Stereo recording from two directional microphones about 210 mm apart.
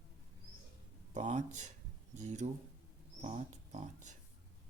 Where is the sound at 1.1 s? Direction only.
35° right (ahead or behind).